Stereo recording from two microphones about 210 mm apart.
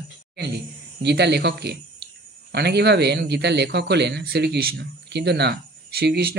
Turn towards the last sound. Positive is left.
turn(degrees=-50)  # may be behind; listen again after turning